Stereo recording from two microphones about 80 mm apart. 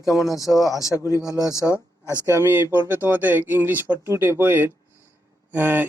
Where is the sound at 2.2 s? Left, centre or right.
Right.